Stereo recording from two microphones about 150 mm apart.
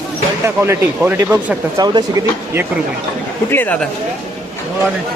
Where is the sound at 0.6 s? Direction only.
20° right (ahead or behind).